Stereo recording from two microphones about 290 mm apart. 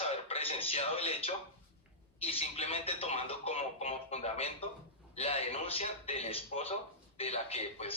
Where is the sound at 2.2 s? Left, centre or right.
Left.